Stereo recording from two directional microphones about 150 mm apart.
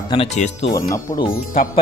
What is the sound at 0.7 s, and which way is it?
Speech, 20° left (ahead or behind).